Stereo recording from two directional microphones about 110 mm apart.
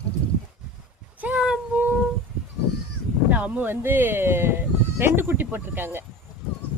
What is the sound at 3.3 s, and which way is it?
Speech, 10° right (ahead or behind).